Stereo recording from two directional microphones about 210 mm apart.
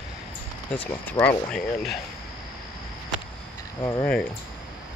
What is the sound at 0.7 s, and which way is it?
Speech, 10° left (ahead or behind).